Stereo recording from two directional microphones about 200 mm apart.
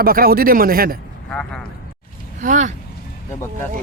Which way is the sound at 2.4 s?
40° right (ahead or behind).